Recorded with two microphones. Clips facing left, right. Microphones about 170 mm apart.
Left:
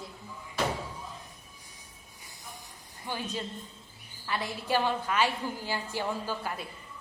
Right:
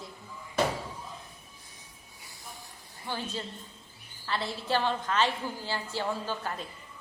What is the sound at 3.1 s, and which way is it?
A woman's voice, 15° left (ahead or behind).